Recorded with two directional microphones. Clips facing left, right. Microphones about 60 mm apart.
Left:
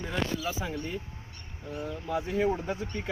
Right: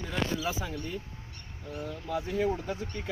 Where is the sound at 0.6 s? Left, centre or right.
Left.